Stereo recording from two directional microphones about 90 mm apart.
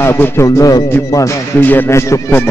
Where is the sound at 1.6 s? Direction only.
20° left (ahead or behind).